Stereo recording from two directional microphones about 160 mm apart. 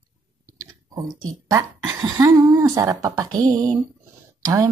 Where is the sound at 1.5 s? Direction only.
20° right (ahead or behind).